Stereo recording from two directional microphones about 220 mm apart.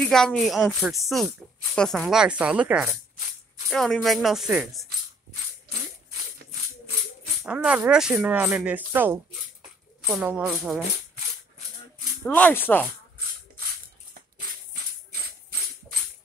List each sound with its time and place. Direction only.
0.0 s speech: 5° left (ahead or behind)
7.4 s speech: 5° right (ahead or behind)
12.3 s speech: 10° left (ahead or behind)